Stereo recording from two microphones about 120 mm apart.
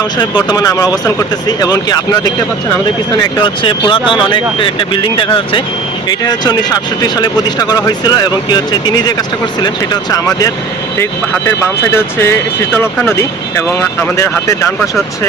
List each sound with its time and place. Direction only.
0.2 s speech: 35° left (ahead or behind)
3.4 s speech: 45° left (ahead or behind)
6.1 s speech: 35° left (ahead or behind)